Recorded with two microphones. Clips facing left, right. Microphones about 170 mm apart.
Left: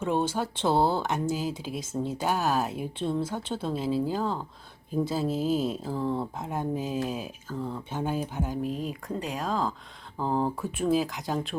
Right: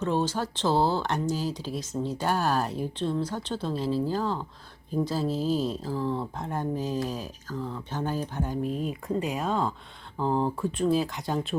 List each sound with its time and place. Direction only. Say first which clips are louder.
0.0 s speech: even; 10° left (ahead or behind)
5.3 s speech: even; 50° left (ahead or behind)
5.5 s speech: even; 5° left (ahead or behind)
5.9 s speech: even; 20° left (ahead or behind)
6.1 s speech: even; 5° left (ahead or behind)